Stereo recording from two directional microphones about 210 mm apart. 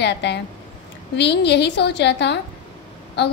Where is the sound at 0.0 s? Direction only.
55° left (ahead or behind).